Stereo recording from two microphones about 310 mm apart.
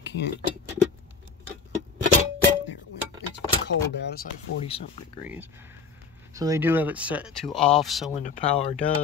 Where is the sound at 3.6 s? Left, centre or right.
Left.